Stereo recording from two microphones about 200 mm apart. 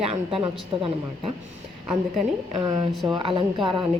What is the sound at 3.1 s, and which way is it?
Speech, 25° right (ahead or behind).